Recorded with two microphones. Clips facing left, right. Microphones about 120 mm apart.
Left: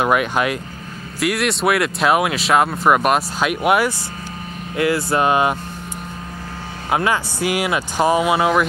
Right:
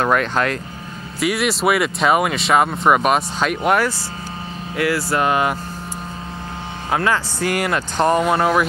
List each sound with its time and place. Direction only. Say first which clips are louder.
0.0 s speech: even; 10° left (ahead or behind)
1.2 s speech: even; centre (ahead or behind)
4.7 s speech: left 1 dB; 25° left (ahead or behind)
6.9 s speech: even; 15° left (ahead or behind)